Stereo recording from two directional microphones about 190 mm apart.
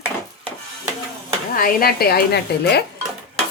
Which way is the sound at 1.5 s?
50° left (ahead or behind).